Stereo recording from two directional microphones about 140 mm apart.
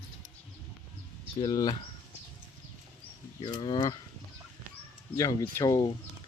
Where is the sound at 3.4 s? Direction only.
40° left (ahead or behind).